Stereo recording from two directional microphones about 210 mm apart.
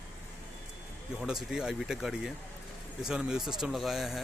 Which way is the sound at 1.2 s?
Centre (ahead or behind).